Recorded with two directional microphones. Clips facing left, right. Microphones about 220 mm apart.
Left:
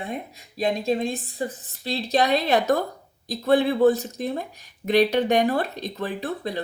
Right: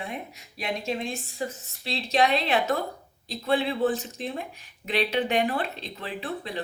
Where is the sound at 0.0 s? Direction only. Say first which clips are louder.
Left 4 dB; 35° left (ahead or behind).